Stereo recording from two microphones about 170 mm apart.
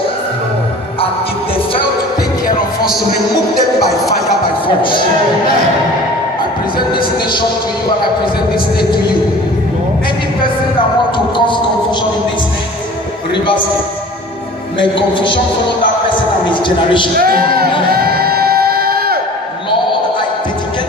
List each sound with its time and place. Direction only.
4.6 s a man's voice: 30° left (ahead or behind)
7.0 s music: 60° left (ahead or behind)
11.3 s a sound: 30° left (ahead or behind)
14.8 s a man's voice: 30° left (ahead or behind)
17.2 s speech: 65° right (ahead or behind)
17.6 s music: 70° right (ahead or behind)